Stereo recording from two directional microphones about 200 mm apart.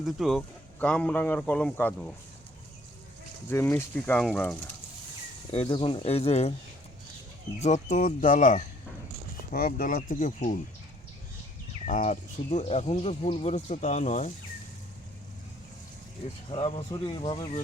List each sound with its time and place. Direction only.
0.0 s speech: centre (ahead or behind)
3.5 s speech: 10° left (ahead or behind)
5.5 s speech: 25° left (ahead or behind)
7.6 s speech: 35° left (ahead or behind)
11.9 s speech: 40° left (ahead or behind)
16.5 s speech: 30° left (ahead or behind)